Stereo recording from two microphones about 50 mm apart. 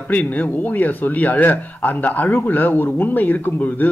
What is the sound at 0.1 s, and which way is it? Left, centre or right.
Speech, left.